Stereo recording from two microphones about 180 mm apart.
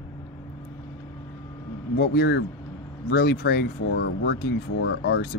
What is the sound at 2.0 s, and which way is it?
Speech, 65° left (ahead or behind).